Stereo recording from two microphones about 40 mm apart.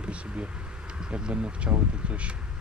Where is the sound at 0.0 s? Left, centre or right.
Right.